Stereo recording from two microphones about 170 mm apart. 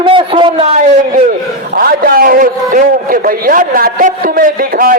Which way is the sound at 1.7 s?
60° right (ahead or behind).